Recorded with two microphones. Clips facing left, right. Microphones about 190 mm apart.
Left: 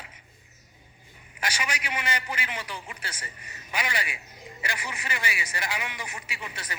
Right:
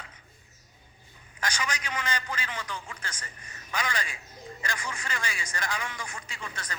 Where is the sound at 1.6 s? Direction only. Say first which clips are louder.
Left 1 dB; 20° left (ahead or behind).